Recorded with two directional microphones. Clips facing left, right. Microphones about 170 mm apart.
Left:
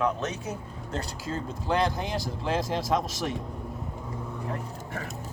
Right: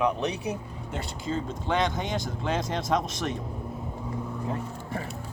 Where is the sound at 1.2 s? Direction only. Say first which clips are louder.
Right 2 dB; 5° left (ahead or behind).